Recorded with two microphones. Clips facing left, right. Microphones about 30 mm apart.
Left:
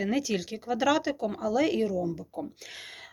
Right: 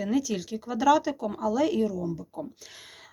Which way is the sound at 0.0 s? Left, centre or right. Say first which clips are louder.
Right 1 dB; left.